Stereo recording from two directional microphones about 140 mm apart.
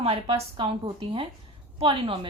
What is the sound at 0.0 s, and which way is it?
A woman's voice, 45° right (ahead or behind).